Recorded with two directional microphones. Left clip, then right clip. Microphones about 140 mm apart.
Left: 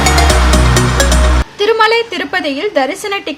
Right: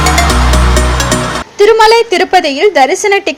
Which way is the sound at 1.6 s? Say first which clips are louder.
Right 6 dB; 30° right (ahead or behind).